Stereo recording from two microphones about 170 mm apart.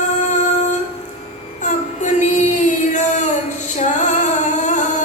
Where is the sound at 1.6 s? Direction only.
45° left (ahead or behind).